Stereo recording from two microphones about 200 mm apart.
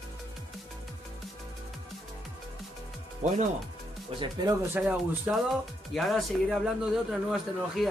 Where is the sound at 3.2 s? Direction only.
35° right (ahead or behind).